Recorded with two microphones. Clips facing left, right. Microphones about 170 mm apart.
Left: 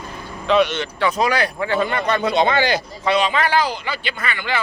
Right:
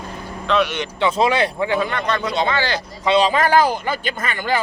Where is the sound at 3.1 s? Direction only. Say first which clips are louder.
Right 3 dB; 35° right (ahead or behind).